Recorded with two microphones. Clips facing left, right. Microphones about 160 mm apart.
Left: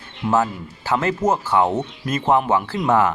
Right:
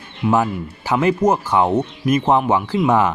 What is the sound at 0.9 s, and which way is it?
Speech, 15° right (ahead or behind).